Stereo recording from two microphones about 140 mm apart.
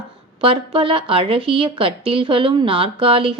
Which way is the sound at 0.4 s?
40° right (ahead or behind).